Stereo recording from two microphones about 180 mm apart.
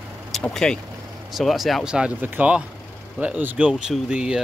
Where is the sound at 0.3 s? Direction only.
5° left (ahead or behind).